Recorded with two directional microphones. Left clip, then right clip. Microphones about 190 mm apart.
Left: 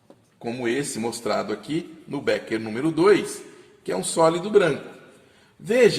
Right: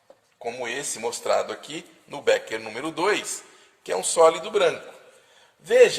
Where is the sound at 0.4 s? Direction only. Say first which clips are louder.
Left 3 dB; 30° right (ahead or behind).